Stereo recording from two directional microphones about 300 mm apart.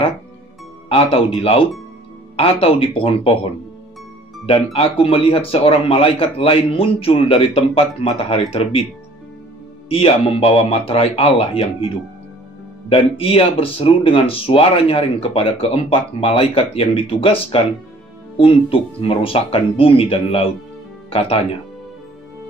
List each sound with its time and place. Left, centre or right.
0.8 s speech: centre
4.7 s speech: centre
9.8 s speech: centre
12.9 s speech: centre